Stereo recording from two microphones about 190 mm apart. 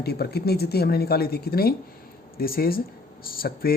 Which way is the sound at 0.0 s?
55° left (ahead or behind).